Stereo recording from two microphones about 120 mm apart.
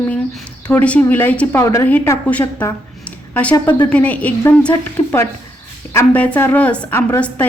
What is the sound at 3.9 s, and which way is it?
A woman's voice, 10° left (ahead or behind).